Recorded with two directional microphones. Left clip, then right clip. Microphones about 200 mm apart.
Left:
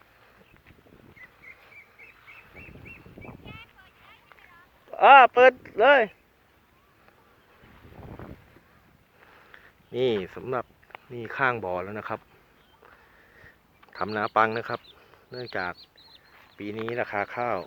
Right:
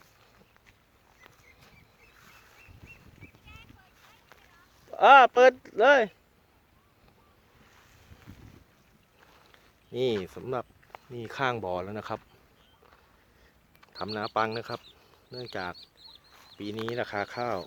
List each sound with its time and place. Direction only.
3.4 s a sound: 60° right (ahead or behind)
4.9 s speech: 25° right (ahead or behind)
9.5 s speech: 5° right (ahead or behind)
13.8 s speech: centre (ahead or behind); by 17.6 s 15° right (ahead or behind)